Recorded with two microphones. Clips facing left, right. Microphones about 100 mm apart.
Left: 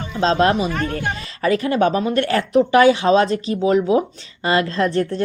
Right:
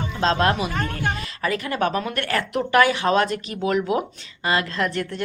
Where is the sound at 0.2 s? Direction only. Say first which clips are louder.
Left 4 dB; 30° left (ahead or behind).